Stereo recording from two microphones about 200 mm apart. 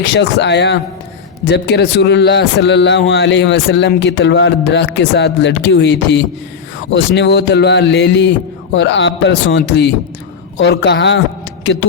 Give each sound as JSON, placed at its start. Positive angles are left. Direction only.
{"t": 0.0, "sound": "a man's voice", "side_deg": 60}
{"t": 11.6, "sound": "music", "side_deg": 60}